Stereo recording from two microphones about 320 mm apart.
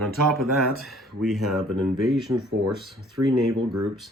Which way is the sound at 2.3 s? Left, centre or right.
Right.